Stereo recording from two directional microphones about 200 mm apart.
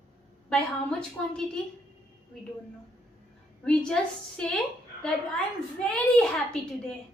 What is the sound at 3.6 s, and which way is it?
Speech, 5° left (ahead or behind).